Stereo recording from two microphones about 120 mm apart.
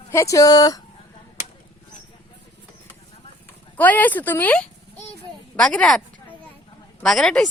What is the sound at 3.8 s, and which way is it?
Speech, 15° left (ahead or behind).